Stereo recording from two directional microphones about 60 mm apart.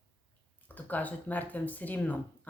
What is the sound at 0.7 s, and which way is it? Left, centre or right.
A woman's voice, left.